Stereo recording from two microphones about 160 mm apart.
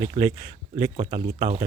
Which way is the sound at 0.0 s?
35° right (ahead or behind).